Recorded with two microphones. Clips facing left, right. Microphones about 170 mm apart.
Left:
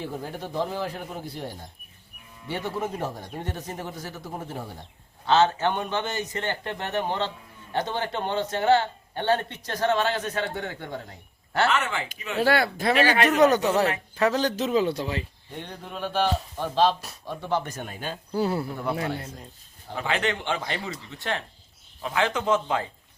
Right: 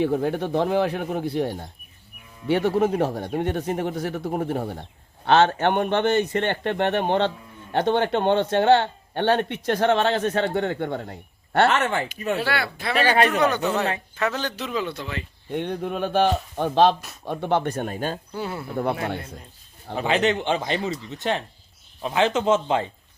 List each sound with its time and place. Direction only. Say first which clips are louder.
0.0 s speech: right 11 dB; 65° right (ahead or behind)
12.1 s speech: right 8 dB; 40° right (ahead or behind)
12.4 s speech: left 4 dB; 45° left (ahead or behind)
15.5 s speech: right 10 dB; 60° right (ahead or behind); by 18.2 s 45° right (ahead or behind)
18.3 s speech: left 5 dB; 35° left (ahead or behind)
20.0 s speech: right 6 dB; 20° right (ahead or behind)